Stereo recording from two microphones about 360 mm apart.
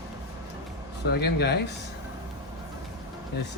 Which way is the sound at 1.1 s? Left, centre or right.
Left.